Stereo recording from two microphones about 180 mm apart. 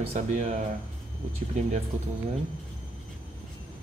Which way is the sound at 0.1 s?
40° right (ahead or behind).